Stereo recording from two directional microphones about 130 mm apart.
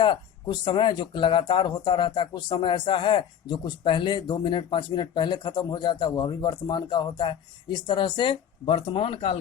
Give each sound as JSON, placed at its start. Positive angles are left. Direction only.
{"t": 0.0, "sound": "speech", "side_deg": 40}